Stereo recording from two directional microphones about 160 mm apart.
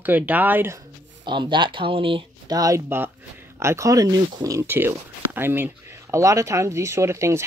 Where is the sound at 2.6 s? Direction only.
20° right (ahead or behind).